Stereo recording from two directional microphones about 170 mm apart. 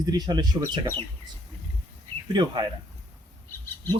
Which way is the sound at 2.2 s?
25° right (ahead or behind).